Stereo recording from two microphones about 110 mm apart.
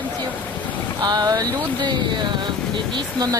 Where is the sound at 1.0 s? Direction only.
40° right (ahead or behind).